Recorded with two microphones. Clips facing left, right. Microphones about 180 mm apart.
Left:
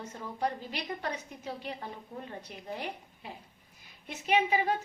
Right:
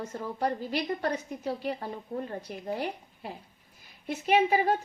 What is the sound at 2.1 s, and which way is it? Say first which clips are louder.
Speech: right 11 dB; 60° right (ahead or behind).